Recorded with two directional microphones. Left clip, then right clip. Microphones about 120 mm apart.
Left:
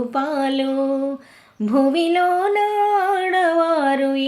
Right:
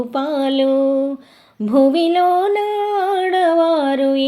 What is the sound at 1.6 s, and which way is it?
Female singing, 30° right (ahead or behind).